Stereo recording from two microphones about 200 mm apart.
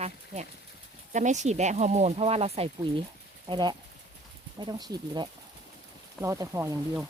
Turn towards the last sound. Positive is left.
turn(degrees=-15)  # may be behind; listen again after turning